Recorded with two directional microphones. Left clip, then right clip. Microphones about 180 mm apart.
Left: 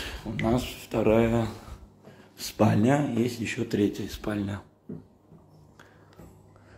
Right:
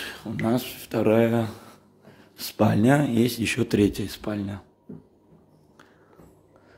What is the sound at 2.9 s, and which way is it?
Speech, 50° right (ahead or behind).